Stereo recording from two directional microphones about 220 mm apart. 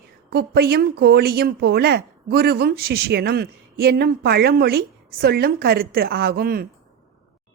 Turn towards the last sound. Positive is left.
turn(degrees=-45)  # may be behind; listen again after turning